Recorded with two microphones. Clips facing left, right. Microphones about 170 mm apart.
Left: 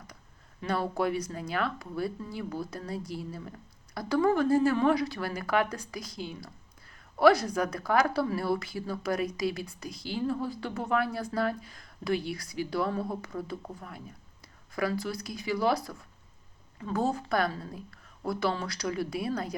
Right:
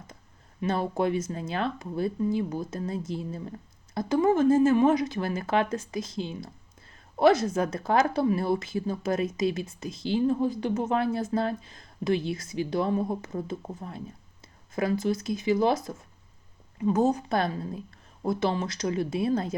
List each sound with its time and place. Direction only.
0.6 s speech: 20° right (ahead or behind)